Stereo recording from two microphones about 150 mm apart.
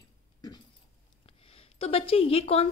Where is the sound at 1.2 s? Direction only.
40° left (ahead or behind).